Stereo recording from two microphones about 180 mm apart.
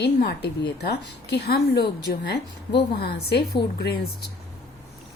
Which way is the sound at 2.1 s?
65° left (ahead or behind).